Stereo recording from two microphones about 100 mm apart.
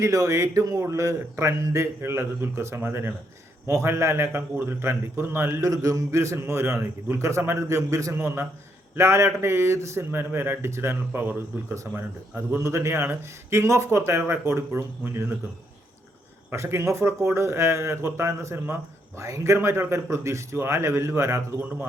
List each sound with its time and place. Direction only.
0.0 s a man's voice: 30° right (ahead or behind)
16.5 s a man's voice: 30° right (ahead or behind)